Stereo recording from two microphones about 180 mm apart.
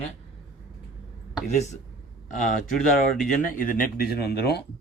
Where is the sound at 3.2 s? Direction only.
50° left (ahead or behind).